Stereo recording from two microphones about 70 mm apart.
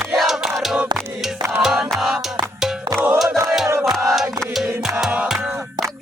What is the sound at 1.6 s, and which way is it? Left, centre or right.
Music, centre.